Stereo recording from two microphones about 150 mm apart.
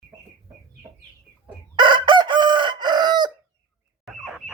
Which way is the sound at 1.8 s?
30° right (ahead or behind).